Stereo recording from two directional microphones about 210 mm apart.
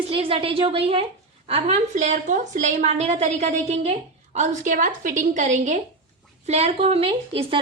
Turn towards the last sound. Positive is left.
turn(degrees=-25)  # may be behind; listen again after turning